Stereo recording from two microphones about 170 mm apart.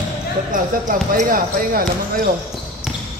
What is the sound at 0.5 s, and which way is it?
Speech, 55° right (ahead or behind).